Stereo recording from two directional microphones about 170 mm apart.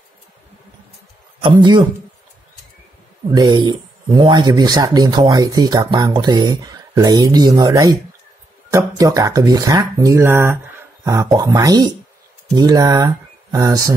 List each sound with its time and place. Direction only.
1.6 s speech: 25° right (ahead or behind)
3.3 s speech: 25° right (ahead or behind)